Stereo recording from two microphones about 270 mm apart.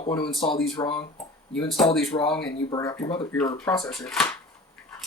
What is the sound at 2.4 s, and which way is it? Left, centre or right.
Speech, left.